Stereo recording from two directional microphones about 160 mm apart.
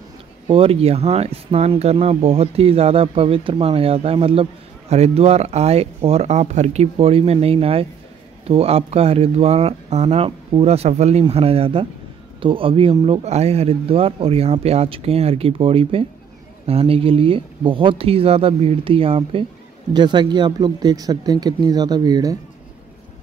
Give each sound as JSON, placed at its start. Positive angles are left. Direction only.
{"t": 0.5, "sound": "speech", "side_deg": -35}